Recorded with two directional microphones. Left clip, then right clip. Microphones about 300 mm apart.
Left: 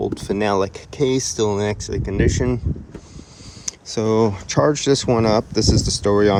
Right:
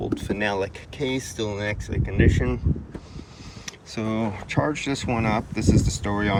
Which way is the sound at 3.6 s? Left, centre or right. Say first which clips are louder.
Left 9 dB; centre.